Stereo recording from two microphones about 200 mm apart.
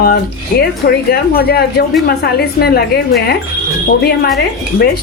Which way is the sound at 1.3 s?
50° left (ahead or behind).